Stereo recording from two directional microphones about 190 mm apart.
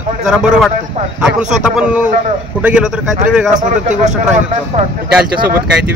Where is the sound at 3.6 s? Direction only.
40° right (ahead or behind).